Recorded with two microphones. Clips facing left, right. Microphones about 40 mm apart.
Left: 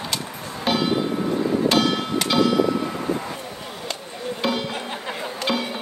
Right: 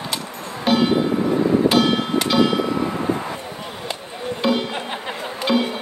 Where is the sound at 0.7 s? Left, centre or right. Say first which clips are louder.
Right 4 dB; centre.